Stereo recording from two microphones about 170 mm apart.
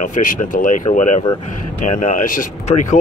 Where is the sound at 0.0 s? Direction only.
50° left (ahead or behind).